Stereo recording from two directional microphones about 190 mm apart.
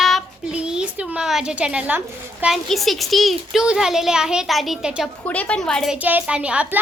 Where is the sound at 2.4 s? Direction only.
Centre (ahead or behind).